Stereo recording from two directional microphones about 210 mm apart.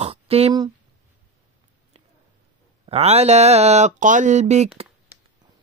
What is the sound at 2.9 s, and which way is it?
Speech, 30° right (ahead or behind).